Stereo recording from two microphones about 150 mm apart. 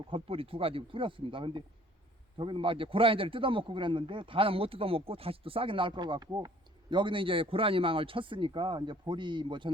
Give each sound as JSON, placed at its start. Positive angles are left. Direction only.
{"t": 0.1, "sound": "a man's voice", "side_deg": -40}